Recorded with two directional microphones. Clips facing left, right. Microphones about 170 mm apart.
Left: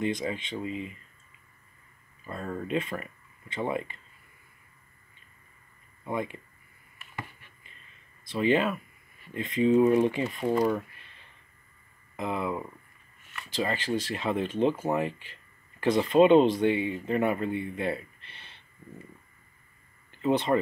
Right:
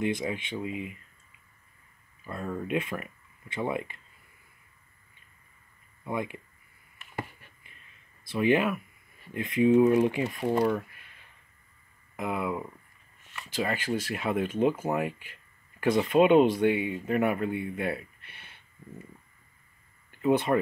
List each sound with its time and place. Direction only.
0.0 s speech: 10° right (ahead or behind)
2.2 s speech: 5° right (ahead or behind)
6.0 s speech: 10° right (ahead or behind)
8.4 s speech: 10° right (ahead or behind)
12.2 s speech: 10° right (ahead or behind)
20.1 s a sound: 10° right (ahead or behind)